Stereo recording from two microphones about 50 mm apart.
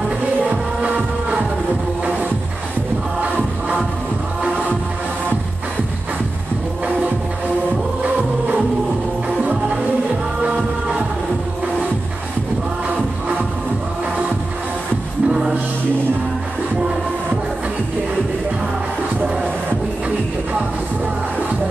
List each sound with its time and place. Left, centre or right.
0.7 s music: right
3.2 s music: right
9.4 s music: right
15.2 s music: centre